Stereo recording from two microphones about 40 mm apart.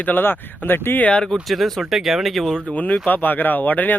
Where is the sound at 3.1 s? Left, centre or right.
Left.